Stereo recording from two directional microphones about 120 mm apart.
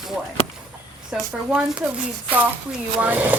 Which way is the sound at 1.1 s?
5° right (ahead or behind).